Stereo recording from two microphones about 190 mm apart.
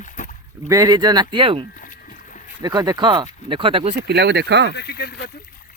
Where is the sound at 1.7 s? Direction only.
45° left (ahead or behind).